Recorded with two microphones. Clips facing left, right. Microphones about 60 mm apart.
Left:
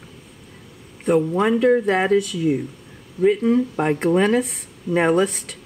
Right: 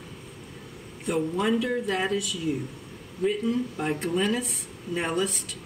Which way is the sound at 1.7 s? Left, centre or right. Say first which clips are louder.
Left 10 dB; left.